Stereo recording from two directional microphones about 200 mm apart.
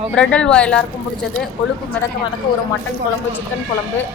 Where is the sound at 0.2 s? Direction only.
5° left (ahead or behind).